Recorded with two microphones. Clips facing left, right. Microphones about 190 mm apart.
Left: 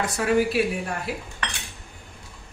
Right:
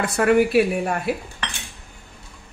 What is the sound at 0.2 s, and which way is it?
Speech, 60° right (ahead or behind).